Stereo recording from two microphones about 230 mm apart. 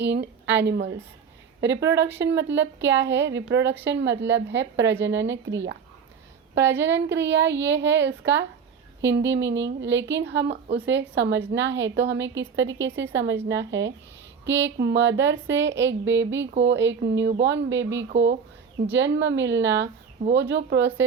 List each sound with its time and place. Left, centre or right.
0.0 s speech: right
6.8 s speech: right